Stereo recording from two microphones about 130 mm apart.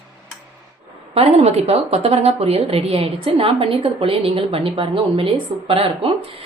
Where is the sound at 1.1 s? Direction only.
50° right (ahead or behind).